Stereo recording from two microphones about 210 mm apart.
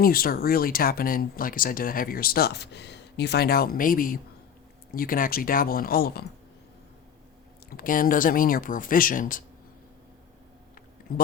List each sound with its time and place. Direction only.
0.0 s speech: 45° left (ahead or behind)
7.7 s speech: 40° left (ahead or behind)